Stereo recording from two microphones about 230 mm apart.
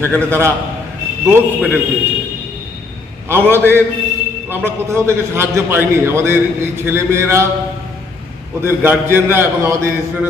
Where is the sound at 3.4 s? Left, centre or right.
Centre.